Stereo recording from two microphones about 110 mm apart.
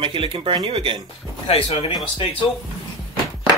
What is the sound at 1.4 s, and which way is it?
Speech, 65° left (ahead or behind).